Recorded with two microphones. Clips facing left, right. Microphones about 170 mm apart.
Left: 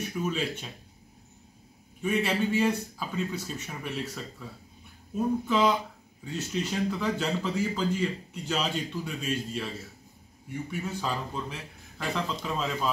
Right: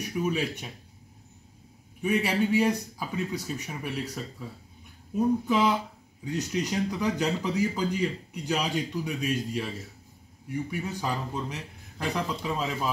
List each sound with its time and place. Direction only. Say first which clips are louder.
0.1 s speech: right 4 dB; 10° right (ahead or behind)
2.0 s speech: right 1 dB; 15° right (ahead or behind)
10.7 s speech: left 3 dB; 15° right (ahead or behind)